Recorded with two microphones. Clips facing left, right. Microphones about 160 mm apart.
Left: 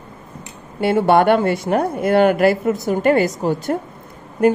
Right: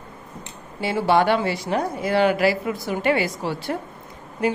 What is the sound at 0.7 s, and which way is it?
A woman's voice, 55° left (ahead or behind).